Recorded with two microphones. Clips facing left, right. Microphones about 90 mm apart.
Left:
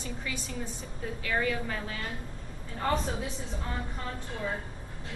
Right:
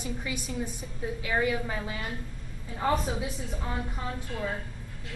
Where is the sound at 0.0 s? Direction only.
15° right (ahead or behind).